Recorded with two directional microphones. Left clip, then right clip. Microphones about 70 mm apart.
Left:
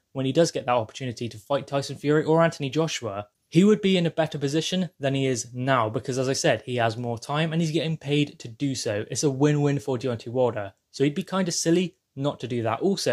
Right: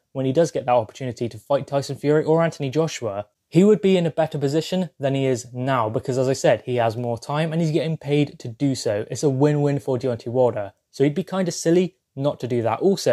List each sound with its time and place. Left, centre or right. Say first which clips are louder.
0.2 s speech: right 3 dB; centre; by 2.1 s right
2.1 s speech: right 1 dB; right
3.5 s speech: right 4 dB; right
7.2 s speech: right 1 dB; right
9.2 s speech: right 3 dB; right